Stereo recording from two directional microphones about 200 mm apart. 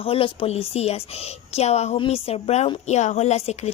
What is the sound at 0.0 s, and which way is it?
A woman's voice, 30° left (ahead or behind).